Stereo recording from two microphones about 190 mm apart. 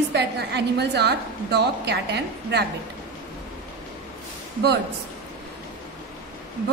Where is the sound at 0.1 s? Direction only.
60° right (ahead or behind).